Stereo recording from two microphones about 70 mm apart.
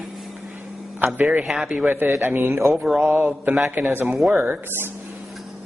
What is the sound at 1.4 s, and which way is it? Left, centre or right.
Speech, centre.